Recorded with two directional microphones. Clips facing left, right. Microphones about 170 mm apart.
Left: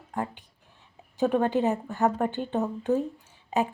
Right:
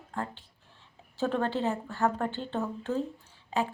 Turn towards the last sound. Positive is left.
turn(degrees=20)  # may be behind; listen again after turning